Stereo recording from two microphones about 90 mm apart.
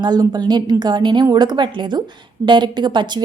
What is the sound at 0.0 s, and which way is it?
A woman's voice, 50° right (ahead or behind).